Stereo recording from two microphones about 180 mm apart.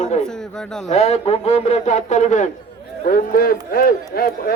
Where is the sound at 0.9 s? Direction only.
35° left (ahead or behind).